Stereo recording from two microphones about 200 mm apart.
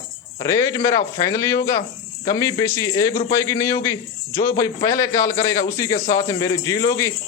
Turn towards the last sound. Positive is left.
turn(degrees=15)  # may be behind; listen again after turning